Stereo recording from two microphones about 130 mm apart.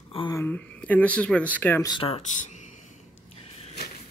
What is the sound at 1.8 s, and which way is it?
Speech, 40° left (ahead or behind).